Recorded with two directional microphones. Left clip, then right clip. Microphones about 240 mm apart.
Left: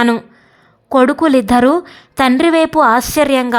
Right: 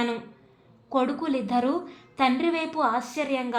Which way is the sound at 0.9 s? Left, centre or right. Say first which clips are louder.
Left 15 dB; left.